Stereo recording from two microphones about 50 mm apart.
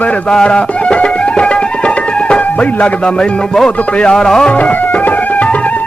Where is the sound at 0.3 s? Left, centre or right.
Centre.